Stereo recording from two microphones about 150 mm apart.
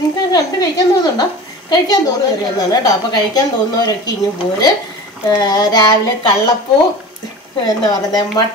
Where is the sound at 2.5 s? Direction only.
25° left (ahead or behind).